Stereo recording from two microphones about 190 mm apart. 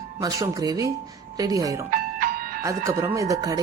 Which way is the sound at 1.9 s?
50° right (ahead or behind).